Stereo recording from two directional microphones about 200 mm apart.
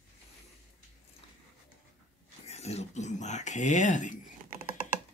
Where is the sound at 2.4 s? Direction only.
30° left (ahead or behind).